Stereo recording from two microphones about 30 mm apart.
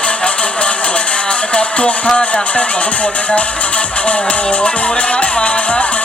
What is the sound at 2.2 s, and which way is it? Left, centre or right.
Speech, left.